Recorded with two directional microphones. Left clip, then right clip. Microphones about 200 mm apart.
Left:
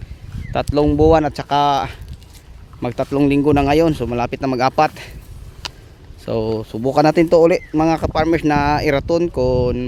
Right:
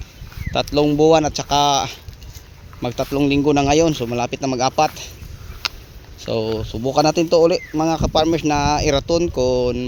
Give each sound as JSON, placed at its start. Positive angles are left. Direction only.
{"t": 0.5, "sound": "speech", "side_deg": 10}
{"t": 6.2, "sound": "speech", "side_deg": 15}